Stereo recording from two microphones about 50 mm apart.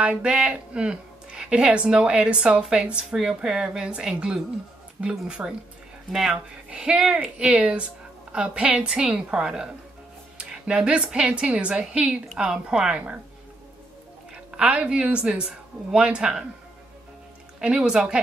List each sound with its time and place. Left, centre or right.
0.0 s speech: right
7.5 s speech: right; by 12.9 s centre
12.9 s speech: right
14.3 s a woman's voice: right
17.6 s speech: centre